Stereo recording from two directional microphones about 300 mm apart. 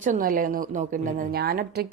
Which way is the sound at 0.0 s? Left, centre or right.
Right.